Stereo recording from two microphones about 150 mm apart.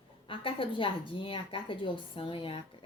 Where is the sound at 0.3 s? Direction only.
35° left (ahead or behind).